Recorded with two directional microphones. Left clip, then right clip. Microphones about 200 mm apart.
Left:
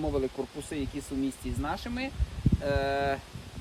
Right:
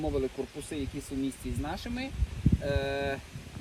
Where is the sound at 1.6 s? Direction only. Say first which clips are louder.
Left 4 dB; centre (ahead or behind).